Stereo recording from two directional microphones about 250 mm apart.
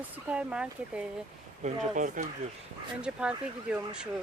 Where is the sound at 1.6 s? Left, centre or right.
Right.